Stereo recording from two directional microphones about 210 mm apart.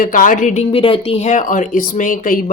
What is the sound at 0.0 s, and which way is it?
A woman's voice, 40° left (ahead or behind).